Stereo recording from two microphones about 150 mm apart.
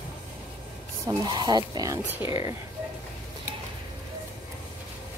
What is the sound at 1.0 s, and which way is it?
Speech, 25° right (ahead or behind).